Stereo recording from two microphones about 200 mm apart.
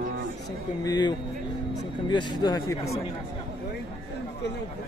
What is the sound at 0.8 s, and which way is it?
A man's voice, 20° left (ahead or behind).